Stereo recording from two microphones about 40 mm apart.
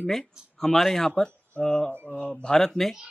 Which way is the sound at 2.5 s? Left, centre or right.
Centre.